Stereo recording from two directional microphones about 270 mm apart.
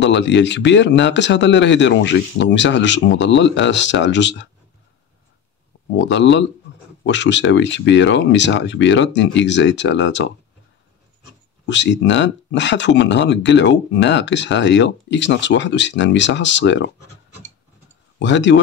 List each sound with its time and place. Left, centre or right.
0.0 s speech: left
5.9 s speech: left
11.6 s speech: left
18.2 s speech: left